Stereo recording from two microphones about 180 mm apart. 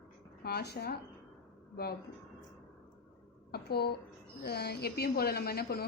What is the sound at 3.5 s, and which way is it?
A woman's voice, 60° left (ahead or behind).